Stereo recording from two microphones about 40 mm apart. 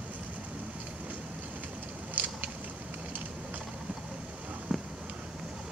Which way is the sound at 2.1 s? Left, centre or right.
Right.